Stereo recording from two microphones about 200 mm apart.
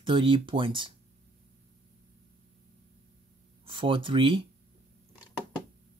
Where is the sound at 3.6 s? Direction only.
25° right (ahead or behind).